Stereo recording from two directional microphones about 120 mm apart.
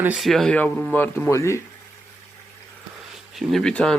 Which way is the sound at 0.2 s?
Centre (ahead or behind).